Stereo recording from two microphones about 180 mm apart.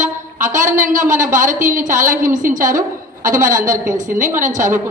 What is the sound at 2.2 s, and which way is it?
A woman's voice, 45° right (ahead or behind).